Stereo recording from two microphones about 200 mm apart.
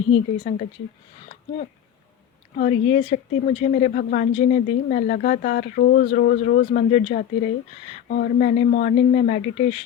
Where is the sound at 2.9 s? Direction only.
35° left (ahead or behind).